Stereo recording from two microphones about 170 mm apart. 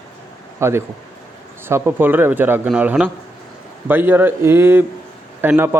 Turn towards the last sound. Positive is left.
turn(degrees=-15)  # may be behind; listen again after turning